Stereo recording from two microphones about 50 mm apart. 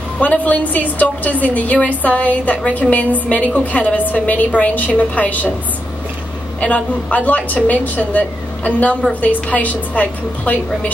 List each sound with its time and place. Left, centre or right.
0.2 s a woman's voice: left
6.6 s a woman's voice: left